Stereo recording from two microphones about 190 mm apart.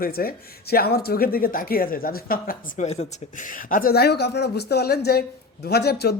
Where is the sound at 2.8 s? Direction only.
35° left (ahead or behind).